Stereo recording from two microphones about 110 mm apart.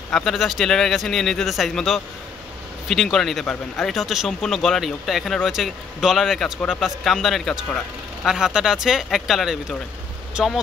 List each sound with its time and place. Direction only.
0.1 s a man's voice: centre (ahead or behind)